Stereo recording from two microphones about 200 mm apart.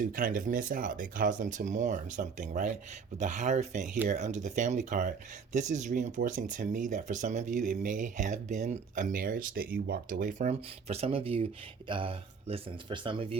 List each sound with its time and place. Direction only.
0.0 s speech: 45° right (ahead or behind); by 13.2 s 25° right (ahead or behind)